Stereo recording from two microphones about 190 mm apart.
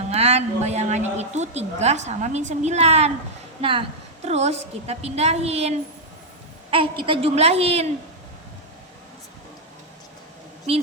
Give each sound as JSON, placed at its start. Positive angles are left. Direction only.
{"t": 0.1, "sound": "a woman's voice", "side_deg": -35}
{"t": 7.0, "sound": "a woman's voice", "side_deg": -30}
{"t": 10.7, "sound": "a woman's voice", "side_deg": -35}